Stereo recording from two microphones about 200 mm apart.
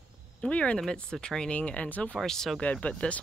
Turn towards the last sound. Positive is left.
turn(degrees=5)  # may be behind; listen again after turning